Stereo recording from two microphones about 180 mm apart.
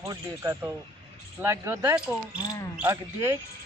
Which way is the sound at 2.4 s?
20° left (ahead or behind).